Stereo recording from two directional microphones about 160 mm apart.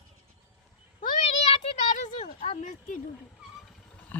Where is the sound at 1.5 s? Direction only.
45° left (ahead or behind).